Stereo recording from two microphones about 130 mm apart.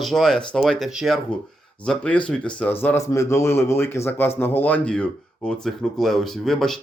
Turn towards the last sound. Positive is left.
turn(degrees=5)  # may be behind; listen again after turning